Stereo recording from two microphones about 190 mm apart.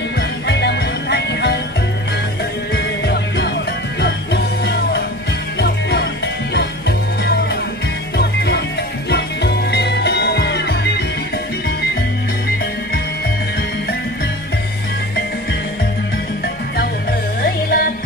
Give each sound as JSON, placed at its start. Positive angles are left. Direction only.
{"t": 0.5, "sound": "music", "side_deg": 60}
{"t": 2.7, "sound": "music", "side_deg": 60}
{"t": 8.2, "sound": "music", "side_deg": 65}
{"t": 17.4, "sound": "music", "side_deg": 55}